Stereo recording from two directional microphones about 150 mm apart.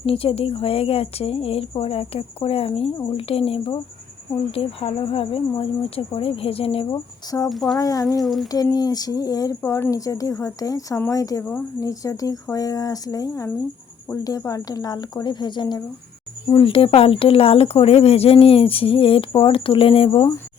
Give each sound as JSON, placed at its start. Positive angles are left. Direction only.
{"t": 0.0, "sound": "speech", "side_deg": 40}
{"t": 7.3, "sound": "a woman's voice", "side_deg": 25}
{"t": 7.5, "sound": "speech", "side_deg": 0}
{"t": 7.8, "sound": "a woman's voice", "side_deg": 25}
{"t": 8.0, "sound": "speech", "side_deg": 0}
{"t": 8.4, "sound": "a woman's voice", "side_deg": 25}